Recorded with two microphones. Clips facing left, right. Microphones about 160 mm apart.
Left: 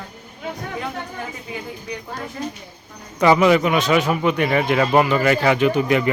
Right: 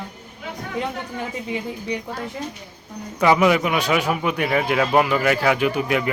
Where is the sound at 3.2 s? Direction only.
5° right (ahead or behind).